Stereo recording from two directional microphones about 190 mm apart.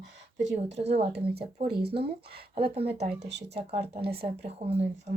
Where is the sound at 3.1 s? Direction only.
65° right (ahead or behind).